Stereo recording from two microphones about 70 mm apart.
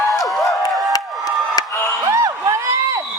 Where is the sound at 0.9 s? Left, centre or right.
Left.